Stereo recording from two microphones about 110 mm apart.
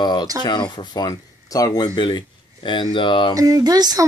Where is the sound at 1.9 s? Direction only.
45° left (ahead or behind).